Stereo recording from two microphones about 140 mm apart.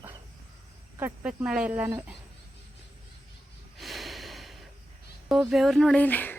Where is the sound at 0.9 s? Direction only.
10° right (ahead or behind).